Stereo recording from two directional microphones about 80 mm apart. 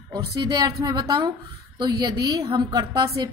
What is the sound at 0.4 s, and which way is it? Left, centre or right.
A woman's voice, right.